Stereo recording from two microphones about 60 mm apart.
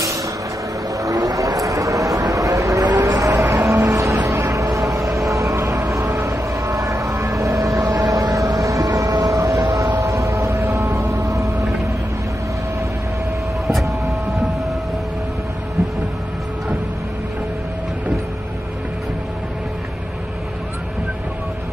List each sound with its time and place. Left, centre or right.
0.9 s vehicle: right
3.2 s music: right
3.4 s music: right
3.9 s vehicle: right
9.6 s civil defense siren: right
10.8 s vehicle: right
11.1 s vehicle: right